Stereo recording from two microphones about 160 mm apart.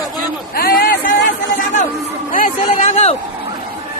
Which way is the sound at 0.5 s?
65° left (ahead or behind).